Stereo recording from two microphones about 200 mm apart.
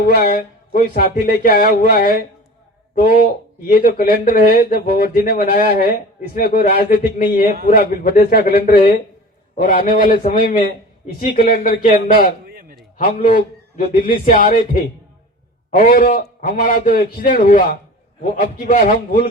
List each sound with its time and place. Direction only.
0.1 s speech: 50° left (ahead or behind)
3.7 s speech: 50° left (ahead or behind)
12.5 s a sound: 45° right (ahead or behind)
13.0 s speech: 45° left (ahead or behind)